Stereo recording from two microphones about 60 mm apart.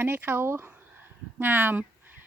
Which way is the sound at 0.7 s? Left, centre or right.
Right.